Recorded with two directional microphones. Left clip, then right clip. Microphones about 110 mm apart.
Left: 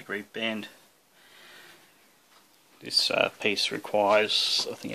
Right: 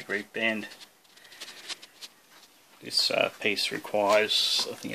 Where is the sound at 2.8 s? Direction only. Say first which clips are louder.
Left 1 dB; 25° left (ahead or behind).